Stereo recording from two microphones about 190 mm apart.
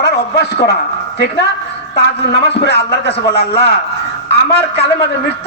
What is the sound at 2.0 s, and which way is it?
A man's voice, 55° left (ahead or behind).